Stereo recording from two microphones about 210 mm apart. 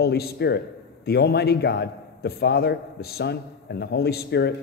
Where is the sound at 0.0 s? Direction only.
50° left (ahead or behind).